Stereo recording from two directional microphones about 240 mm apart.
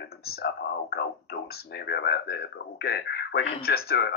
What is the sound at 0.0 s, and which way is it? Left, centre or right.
A man's voice, left.